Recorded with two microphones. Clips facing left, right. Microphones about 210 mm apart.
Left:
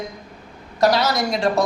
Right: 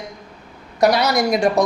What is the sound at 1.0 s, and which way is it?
Speech, 15° right (ahead or behind).